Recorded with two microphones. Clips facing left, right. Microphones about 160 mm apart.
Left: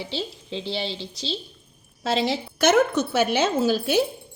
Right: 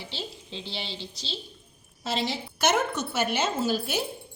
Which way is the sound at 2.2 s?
70° left (ahead or behind).